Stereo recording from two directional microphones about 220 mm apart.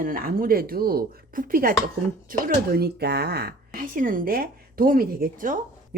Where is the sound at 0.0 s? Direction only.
40° right (ahead or behind).